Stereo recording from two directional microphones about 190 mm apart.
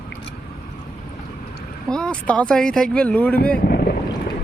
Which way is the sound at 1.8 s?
5° left (ahead or behind).